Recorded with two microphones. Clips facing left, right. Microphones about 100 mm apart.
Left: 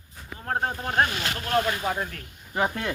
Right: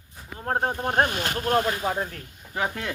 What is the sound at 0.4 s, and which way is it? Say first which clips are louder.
Speech: right 3 dB; 25° right (ahead or behind).